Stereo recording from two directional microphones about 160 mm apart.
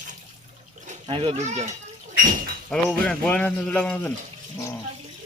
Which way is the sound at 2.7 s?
5° left (ahead or behind).